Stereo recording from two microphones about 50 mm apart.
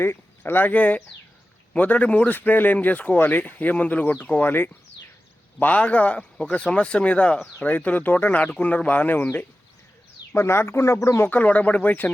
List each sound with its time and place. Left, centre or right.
0.0 s speech: left
0.7 s speech: left
5.5 s speech: left
10.3 s speech: left
11.3 s speech: left